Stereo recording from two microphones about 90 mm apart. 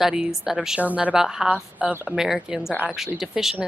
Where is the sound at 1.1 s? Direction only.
5° right (ahead or behind).